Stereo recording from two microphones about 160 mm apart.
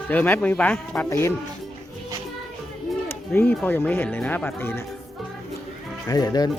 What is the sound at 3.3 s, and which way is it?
Speech, 15° left (ahead or behind).